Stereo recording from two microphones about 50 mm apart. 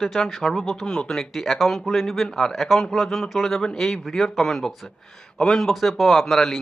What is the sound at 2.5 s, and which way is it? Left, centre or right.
A man's voice, centre.